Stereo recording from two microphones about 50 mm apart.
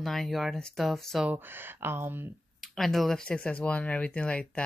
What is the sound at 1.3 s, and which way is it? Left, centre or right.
Speech, right.